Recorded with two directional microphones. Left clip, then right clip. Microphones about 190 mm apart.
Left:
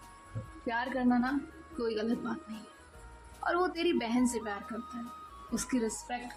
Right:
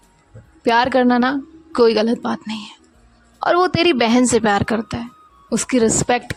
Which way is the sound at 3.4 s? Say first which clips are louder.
Right 15 dB; 45° right (ahead or behind).